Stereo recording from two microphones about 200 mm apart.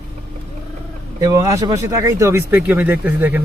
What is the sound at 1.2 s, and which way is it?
Speech, 15° right (ahead or behind).